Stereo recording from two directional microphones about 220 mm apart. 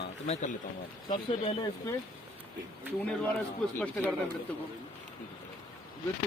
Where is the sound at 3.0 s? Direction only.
5° left (ahead or behind).